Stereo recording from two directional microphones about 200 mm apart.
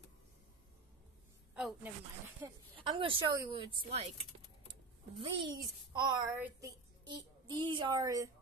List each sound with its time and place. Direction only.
1.5 s a woman's voice: 5° right (ahead or behind)
2.4 s speech: 25° right (ahead or behind)
5.2 s speech: 25° right (ahead or behind)
6.3 s a woman's voice: 10° right (ahead or behind)
7.1 s speech: 20° right (ahead or behind)